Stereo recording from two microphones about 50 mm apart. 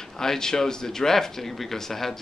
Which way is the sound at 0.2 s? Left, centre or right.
Centre.